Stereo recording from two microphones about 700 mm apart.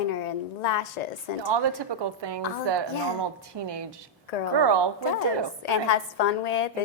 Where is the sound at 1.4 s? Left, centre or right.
Right.